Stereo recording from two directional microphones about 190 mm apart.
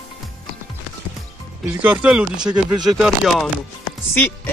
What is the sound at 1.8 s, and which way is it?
Speech, 10° right (ahead or behind).